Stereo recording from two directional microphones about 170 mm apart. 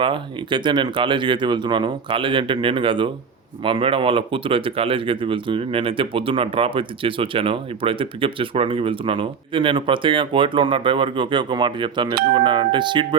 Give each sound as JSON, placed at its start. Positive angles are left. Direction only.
{"t": 0.0, "sound": "speech", "side_deg": -30}